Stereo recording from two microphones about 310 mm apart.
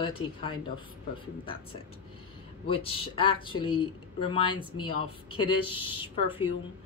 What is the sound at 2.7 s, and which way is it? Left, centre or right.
Speech, centre.